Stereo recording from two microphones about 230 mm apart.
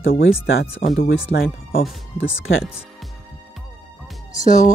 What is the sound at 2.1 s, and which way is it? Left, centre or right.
Speech, left.